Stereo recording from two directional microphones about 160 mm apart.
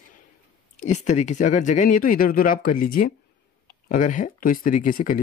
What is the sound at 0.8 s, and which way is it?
Speech, 45° left (ahead or behind).